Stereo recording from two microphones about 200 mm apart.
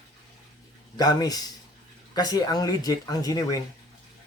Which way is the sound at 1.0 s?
20° left (ahead or behind).